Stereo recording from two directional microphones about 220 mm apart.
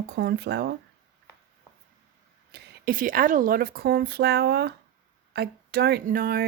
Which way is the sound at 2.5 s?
40° right (ahead or behind).